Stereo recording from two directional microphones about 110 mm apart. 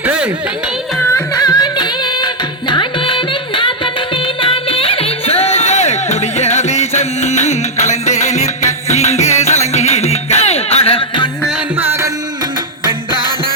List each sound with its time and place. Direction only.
0.0 s a sound: 15° right (ahead or behind)
1.1 s music: 35° left (ahead or behind); by 11.3 s 55° left (ahead or behind)
11.8 s music: 25° right (ahead or behind)